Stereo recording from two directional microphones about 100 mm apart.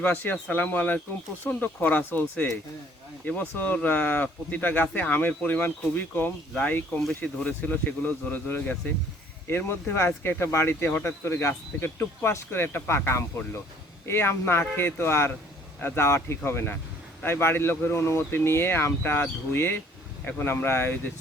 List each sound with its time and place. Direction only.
0.0 s speech: 20° left (ahead or behind)